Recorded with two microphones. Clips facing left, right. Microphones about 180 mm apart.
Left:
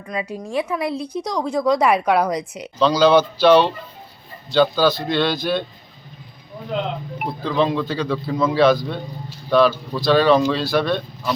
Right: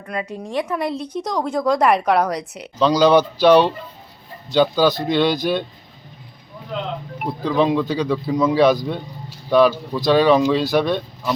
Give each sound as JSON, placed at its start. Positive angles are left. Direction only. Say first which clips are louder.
{"t": 0.2, "sound": "speech", "louder": "even", "side_deg": 0}
{"t": 7.3, "sound": "speech", "louder": "right 2 dB", "side_deg": -15}